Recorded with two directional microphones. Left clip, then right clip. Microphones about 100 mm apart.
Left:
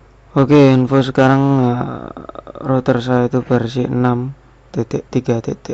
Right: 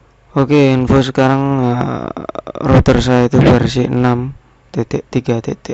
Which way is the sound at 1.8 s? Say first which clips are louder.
Right 6 dB; 30° right (ahead or behind).